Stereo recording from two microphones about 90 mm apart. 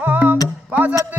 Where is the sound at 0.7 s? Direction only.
20° right (ahead or behind).